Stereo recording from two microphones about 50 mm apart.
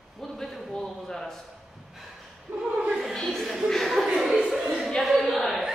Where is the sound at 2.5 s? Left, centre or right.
Right.